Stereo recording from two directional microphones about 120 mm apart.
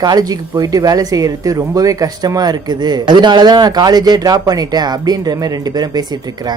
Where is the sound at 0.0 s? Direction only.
35° right (ahead or behind).